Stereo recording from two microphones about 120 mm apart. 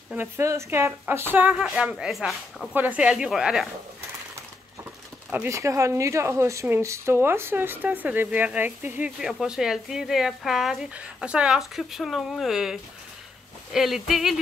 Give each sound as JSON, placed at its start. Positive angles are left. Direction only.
{"t": 0.1, "sound": "speech", "side_deg": -20}
{"t": 1.5, "sound": "speech", "side_deg": -5}
{"t": 2.7, "sound": "speech", "side_deg": -15}
{"t": 5.5, "sound": "speech", "side_deg": -25}
{"t": 9.2, "sound": "speech", "side_deg": -5}
{"t": 13.7, "sound": "speech", "side_deg": -5}